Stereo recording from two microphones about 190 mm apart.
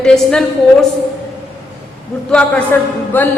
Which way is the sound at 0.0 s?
5° left (ahead or behind).